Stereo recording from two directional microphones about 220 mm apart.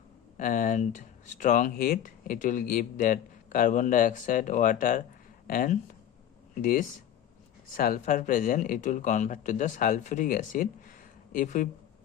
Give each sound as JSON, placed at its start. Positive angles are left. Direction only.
{"t": 0.3, "sound": "speech", "side_deg": 35}